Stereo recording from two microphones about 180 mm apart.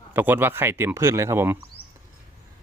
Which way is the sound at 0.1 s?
10° right (ahead or behind).